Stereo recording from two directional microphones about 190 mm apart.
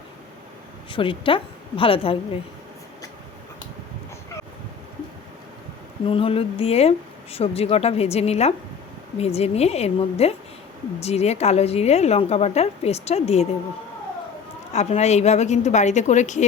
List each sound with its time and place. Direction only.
0.9 s a woman's voice: 25° left (ahead or behind)
6.1 s a woman's voice: 30° left (ahead or behind)
14.7 s a woman's voice: 35° left (ahead or behind)